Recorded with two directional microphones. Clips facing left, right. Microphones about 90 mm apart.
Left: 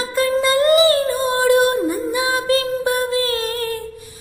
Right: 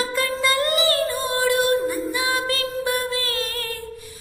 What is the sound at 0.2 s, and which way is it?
Music, 25° left (ahead or behind).